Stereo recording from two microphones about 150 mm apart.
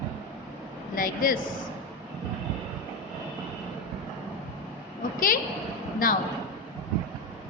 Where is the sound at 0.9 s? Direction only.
70° left (ahead or behind).